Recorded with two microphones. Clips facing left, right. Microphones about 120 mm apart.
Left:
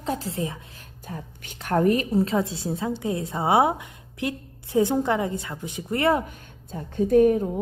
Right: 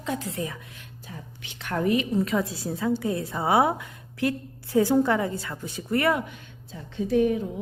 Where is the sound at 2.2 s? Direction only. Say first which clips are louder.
Left 2 dB; 25° left (ahead or behind).